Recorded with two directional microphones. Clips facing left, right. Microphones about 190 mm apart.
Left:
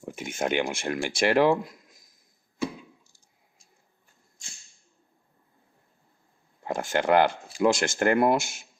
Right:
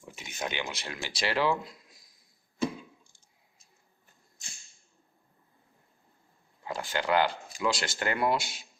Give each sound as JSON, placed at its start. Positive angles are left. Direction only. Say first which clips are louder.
{"t": 0.0, "sound": "speech", "louder": "left 8 dB", "side_deg": 50}
{"t": 6.7, "sound": "speech", "louder": "left 6 dB", "side_deg": 50}